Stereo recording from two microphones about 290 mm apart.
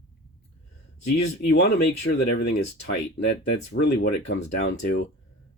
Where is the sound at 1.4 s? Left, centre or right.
Left.